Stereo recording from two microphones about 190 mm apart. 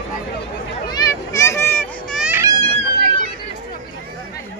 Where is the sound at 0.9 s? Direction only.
20° left (ahead or behind).